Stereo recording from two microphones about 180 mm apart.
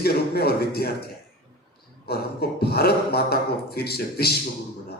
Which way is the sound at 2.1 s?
60° left (ahead or behind).